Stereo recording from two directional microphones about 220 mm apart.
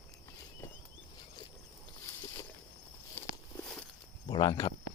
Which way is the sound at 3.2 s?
10° left (ahead or behind).